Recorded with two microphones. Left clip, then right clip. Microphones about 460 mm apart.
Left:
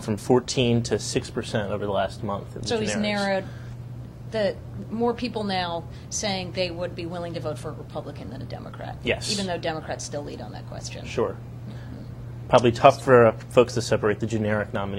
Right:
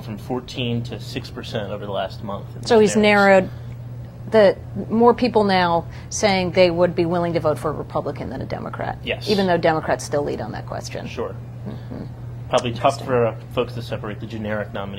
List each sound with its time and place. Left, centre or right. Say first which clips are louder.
0.0 s speech: left 6 dB; left
1.3 s speech: even; left
2.6 s a woman's voice: right 13 dB; right
9.0 s speech: right 2 dB; left
9.4 s a woman's voice: right 11 dB; right
11.1 s speech: left 5 dB; left
12.4 s speech: left 3 dB; left
14.4 s speech: even; left